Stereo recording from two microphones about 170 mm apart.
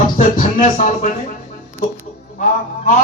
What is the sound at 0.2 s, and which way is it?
Speech, 50° left (ahead or behind).